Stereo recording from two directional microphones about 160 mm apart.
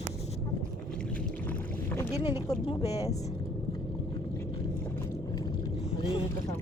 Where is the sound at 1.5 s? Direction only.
10° left (ahead or behind).